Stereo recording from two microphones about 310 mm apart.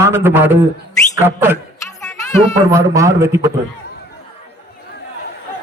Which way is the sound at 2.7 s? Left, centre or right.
Centre.